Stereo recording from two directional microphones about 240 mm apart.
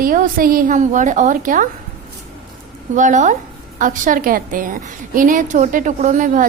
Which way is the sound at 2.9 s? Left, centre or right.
Right.